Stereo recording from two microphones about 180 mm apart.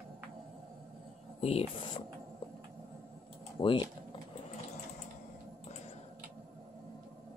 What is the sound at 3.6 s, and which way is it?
Speech, 25° left (ahead or behind).